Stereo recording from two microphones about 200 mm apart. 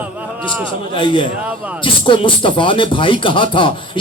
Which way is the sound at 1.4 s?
5° right (ahead or behind).